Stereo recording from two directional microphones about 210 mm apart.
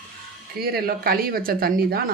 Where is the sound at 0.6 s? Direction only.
45° right (ahead or behind).